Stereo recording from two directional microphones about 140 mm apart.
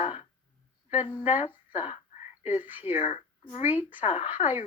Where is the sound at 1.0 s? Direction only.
35° left (ahead or behind).